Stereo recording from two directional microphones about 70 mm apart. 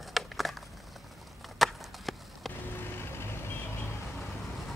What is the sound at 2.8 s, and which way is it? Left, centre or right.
Mechanisms, left.